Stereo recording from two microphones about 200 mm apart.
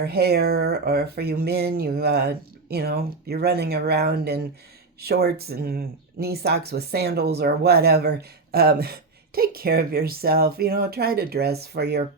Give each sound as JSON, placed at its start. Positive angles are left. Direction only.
{"t": 0.0, "sound": "speech", "side_deg": -55}